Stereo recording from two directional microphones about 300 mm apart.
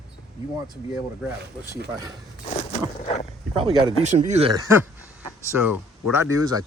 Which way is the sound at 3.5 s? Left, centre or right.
Centre.